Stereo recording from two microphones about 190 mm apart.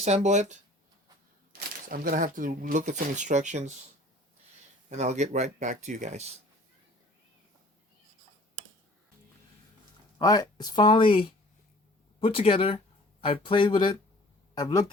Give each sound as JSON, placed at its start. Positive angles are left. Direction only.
{"t": 0.0, "sound": "speech", "side_deg": -35}
{"t": 1.5, "sound": "speech", "side_deg": -50}
{"t": 4.9, "sound": "speech", "side_deg": -35}
{"t": 10.2, "sound": "speech", "side_deg": 20}